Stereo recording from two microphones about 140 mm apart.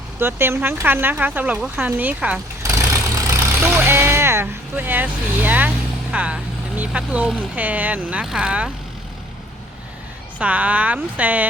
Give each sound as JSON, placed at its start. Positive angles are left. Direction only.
{"t": 0.2, "sound": "speech", "side_deg": -15}
{"t": 10.3, "sound": "speech", "side_deg": -10}